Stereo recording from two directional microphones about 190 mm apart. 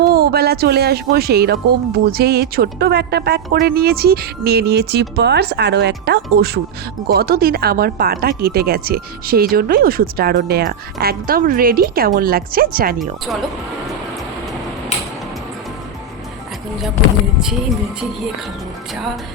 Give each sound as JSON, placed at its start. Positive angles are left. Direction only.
{"t": 0.1, "sound": "speech", "side_deg": -55}